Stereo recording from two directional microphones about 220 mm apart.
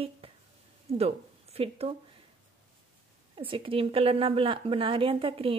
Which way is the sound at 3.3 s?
25° right (ahead or behind).